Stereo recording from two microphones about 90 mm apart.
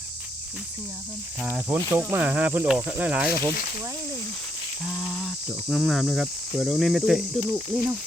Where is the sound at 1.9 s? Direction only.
25° right (ahead or behind).